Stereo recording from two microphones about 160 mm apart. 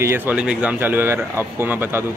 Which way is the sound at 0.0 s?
15° right (ahead or behind).